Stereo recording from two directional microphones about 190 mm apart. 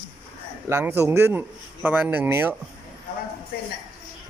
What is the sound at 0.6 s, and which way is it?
Speech, 15° right (ahead or behind).